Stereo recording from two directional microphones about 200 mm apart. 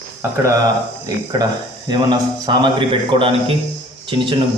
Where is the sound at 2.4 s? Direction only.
25° right (ahead or behind).